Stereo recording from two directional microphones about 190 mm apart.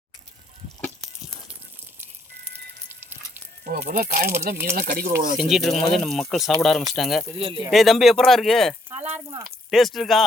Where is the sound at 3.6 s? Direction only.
45° right (ahead or behind).